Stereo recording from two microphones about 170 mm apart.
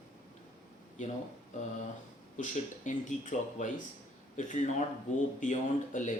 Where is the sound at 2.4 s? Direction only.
45° left (ahead or behind).